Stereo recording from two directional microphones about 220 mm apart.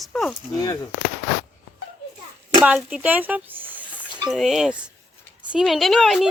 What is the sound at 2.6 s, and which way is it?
A child's voice, 5° right (ahead or behind).